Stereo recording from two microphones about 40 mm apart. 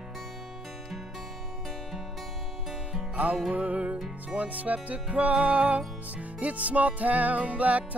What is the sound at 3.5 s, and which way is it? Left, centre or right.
Music, right.